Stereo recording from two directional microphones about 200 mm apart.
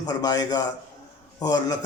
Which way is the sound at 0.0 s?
20° left (ahead or behind).